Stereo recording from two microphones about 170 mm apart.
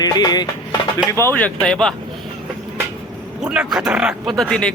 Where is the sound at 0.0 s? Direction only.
25° left (ahead or behind).